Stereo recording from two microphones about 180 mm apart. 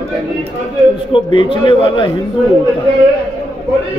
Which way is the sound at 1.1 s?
30° left (ahead or behind).